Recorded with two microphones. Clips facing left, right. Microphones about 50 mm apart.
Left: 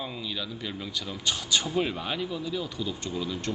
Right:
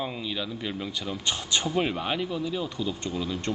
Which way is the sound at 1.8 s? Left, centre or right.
Centre.